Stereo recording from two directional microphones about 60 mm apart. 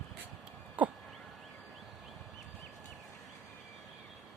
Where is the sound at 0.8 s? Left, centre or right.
Right.